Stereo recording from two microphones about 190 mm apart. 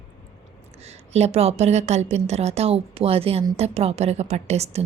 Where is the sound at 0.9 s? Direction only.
35° right (ahead or behind).